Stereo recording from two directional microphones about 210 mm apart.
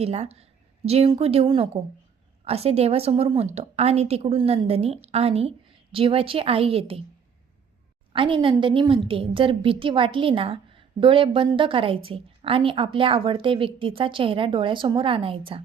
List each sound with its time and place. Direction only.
0.0 s a woman's voice: 30° right (ahead or behind)
8.1 s a woman's voice: 25° right (ahead or behind)